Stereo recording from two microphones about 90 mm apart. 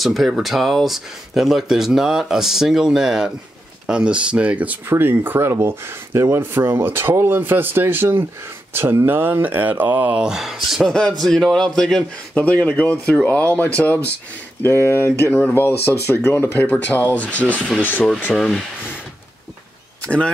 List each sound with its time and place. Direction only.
0.0 s speech: centre (ahead or behind); by 4.7 s 15° right (ahead or behind)
4.8 s speech: 25° right (ahead or behind); by 12.0 s 5° left (ahead or behind)
12.4 s speech: 15° left (ahead or behind)
18.3 s speech: 5° left (ahead or behind)